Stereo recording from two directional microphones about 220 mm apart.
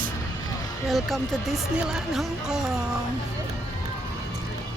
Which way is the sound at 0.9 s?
Centre (ahead or behind).